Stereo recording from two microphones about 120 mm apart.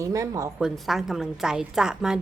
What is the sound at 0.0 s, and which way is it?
Speech, 25° right (ahead or behind).